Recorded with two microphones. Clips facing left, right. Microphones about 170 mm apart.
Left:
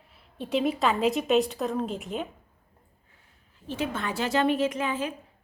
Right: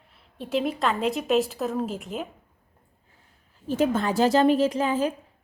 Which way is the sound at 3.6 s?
40° right (ahead or behind).